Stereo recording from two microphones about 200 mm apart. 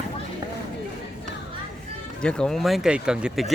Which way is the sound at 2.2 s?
5° left (ahead or behind).